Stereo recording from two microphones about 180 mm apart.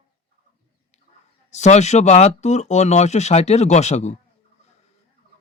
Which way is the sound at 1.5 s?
40° left (ahead or behind).